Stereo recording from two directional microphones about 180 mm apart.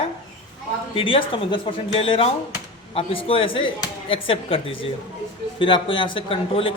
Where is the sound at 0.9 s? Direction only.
30° left (ahead or behind).